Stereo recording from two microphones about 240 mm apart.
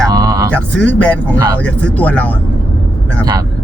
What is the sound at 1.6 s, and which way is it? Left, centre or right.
Speech, centre.